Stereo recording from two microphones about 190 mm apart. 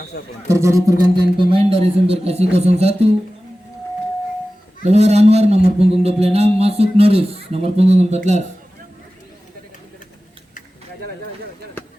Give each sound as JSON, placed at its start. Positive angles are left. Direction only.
{"t": 0.4, "sound": "a man's voice", "side_deg": -15}
{"t": 4.9, "sound": "a man's voice", "side_deg": -35}